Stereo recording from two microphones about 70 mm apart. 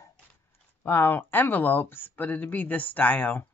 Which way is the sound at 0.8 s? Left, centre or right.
Left.